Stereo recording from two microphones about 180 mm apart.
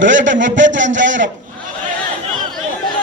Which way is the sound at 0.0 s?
90° right.